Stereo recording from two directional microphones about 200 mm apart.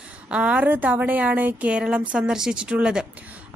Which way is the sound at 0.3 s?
5° right (ahead or behind).